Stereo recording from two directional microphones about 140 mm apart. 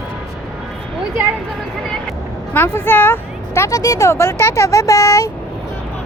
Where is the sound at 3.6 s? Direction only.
25° left (ahead or behind).